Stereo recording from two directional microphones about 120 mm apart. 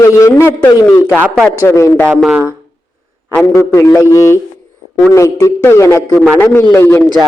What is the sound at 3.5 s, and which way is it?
A man's voice, 20° left (ahead or behind).